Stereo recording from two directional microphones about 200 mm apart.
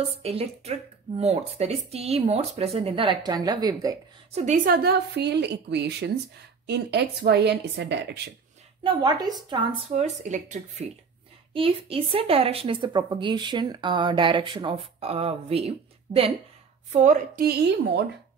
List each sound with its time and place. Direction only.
0.2 s speech: 30° right (ahead or behind)
4.3 s a woman's voice: 40° right (ahead or behind); by 8.2 s 60° right (ahead or behind)
8.8 s speech: 20° right (ahead or behind)
9.9 s a woman's voice: 35° right (ahead or behind); by 18.0 s 55° right (ahead or behind)